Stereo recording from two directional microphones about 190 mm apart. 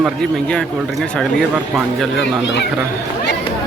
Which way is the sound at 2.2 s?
65° left (ahead or behind).